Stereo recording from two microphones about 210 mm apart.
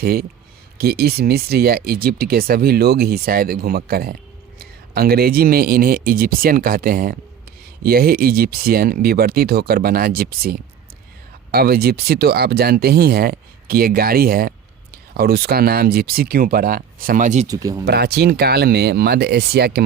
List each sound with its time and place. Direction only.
0.0 s speech: 45° right (ahead or behind)
17.4 s speech: 15° right (ahead or behind)
17.8 s speech: 50° right (ahead or behind)